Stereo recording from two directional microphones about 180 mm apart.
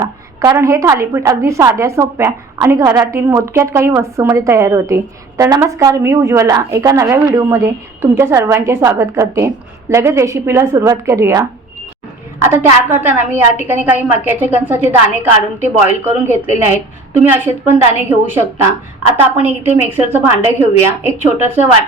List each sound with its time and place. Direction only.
0.0 s a woman's voice: 15° right (ahead or behind)
18.1 s a woman's voice: 10° right (ahead or behind)
19.6 s a woman's voice: 10° right (ahead or behind)